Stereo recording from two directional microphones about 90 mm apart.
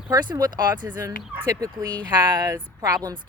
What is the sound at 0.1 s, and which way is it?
Speech, 50° right (ahead or behind).